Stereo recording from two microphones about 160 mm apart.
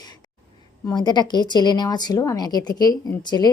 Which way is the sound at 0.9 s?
25° left (ahead or behind).